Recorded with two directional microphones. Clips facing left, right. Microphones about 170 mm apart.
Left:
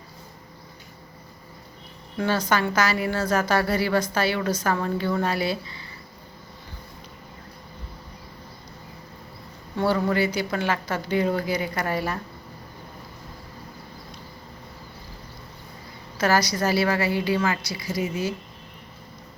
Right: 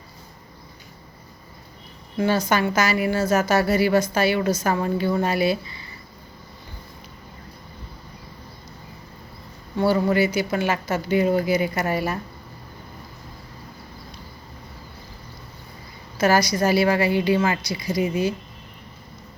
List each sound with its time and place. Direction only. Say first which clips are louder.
2.1 s a woman's voice: right 3 dB; 15° right (ahead or behind)
9.7 s speech: right 3 dB; 10° right (ahead or behind)
16.2 s speech: right 3 dB; 10° right (ahead or behind)